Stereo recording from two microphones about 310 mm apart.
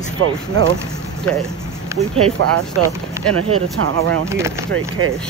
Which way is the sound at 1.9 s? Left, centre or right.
Centre.